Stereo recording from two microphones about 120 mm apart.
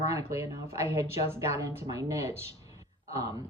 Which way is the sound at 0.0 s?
25° right (ahead or behind).